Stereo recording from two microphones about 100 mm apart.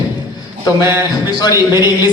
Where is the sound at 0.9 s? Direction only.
25° right (ahead or behind).